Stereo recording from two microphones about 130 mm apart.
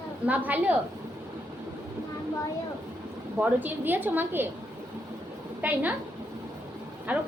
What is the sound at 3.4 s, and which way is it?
A woman's voice, 15° right (ahead or behind).